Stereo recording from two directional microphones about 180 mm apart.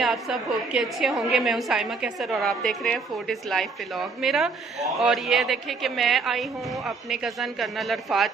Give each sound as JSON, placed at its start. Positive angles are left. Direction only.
{"t": 0.0, "sound": "a woman's voice", "side_deg": 0}